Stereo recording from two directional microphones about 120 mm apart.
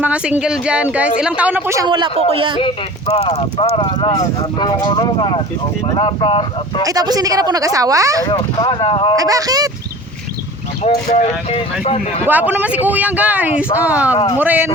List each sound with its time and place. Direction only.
0.0 s speech: 10° right (ahead or behind)
1.8 s speech: 40° right (ahead or behind)
2.1 s speech: 55° right (ahead or behind)
3.2 s speech: 50° left (ahead or behind)
6.8 s speech: 30° right (ahead or behind)
8.2 s speech: 35° left (ahead or behind)
8.7 s speech: 45° left (ahead or behind)
9.1 s speech: 30° right (ahead or behind)
10.8 s speech: 55° left (ahead or behind)
12.2 s speech: 15° right (ahead or behind)